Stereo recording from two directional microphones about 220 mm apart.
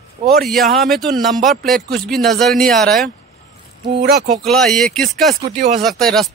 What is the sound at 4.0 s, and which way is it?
Speech, 45° right (ahead or behind).